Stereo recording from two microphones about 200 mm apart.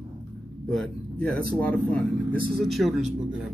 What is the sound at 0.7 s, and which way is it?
A man's voice, 5° left (ahead or behind).